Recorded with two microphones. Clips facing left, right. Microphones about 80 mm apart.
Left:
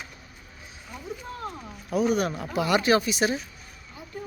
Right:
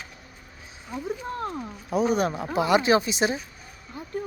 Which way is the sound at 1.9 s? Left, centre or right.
Right.